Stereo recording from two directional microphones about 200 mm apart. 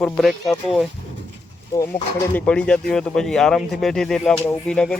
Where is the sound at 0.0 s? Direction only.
Centre (ahead or behind).